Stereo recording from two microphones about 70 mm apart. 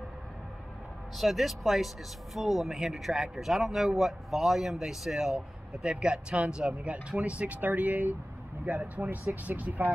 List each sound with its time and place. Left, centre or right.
1.1 s speech: centre; by 9.8 s right